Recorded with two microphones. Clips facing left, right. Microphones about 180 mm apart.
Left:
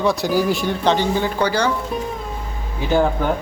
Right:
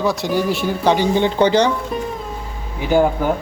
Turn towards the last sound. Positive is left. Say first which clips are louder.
# right 2 dB
turn(degrees=-15)  # may be behind; listen again after turning